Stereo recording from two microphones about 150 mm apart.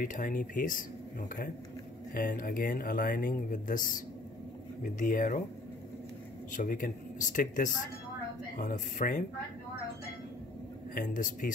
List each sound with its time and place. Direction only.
0.0 s speech: 60° left (ahead or behind)
2.1 s speech: 70° left (ahead or behind)
6.5 s speech: 60° left (ahead or behind)
11.0 s speech: 60° left (ahead or behind)